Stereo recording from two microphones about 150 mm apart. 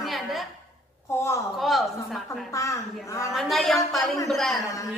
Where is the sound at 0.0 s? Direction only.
Centre (ahead or behind).